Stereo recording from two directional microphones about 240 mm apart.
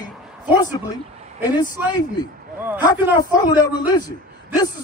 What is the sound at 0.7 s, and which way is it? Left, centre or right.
Speech, centre.